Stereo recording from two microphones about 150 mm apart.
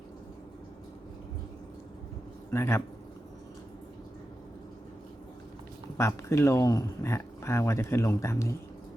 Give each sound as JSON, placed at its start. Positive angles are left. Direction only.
{"t": 2.5, "sound": "speech", "side_deg": 20}
{"t": 6.0, "sound": "speech", "side_deg": 20}